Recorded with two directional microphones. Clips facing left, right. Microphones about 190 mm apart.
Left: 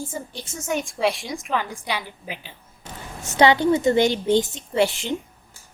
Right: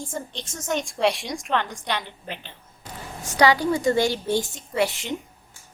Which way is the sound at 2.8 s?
25° left (ahead or behind).